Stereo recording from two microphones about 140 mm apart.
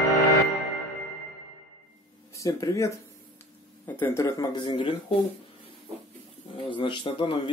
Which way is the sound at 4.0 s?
20° left (ahead or behind).